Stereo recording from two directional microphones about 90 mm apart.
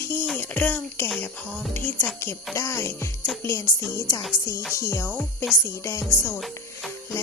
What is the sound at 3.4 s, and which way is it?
Music, 35° left (ahead or behind).